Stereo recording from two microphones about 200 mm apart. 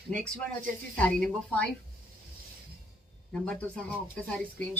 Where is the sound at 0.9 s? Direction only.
5° left (ahead or behind).